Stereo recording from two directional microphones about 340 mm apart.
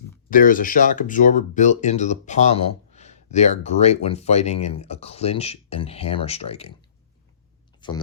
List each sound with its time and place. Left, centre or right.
0.3 s speech: left
7.8 s speech: centre